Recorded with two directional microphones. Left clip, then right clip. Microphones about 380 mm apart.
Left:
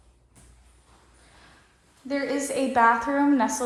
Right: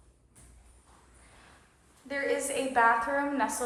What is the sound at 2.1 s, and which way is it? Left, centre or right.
A woman's voice, centre.